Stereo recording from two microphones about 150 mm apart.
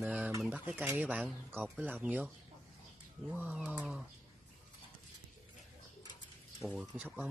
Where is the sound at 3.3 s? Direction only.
10° right (ahead or behind).